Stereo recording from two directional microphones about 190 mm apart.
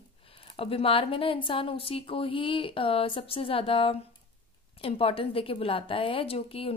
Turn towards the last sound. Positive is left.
turn(degrees=30)  # may be behind; listen again after turning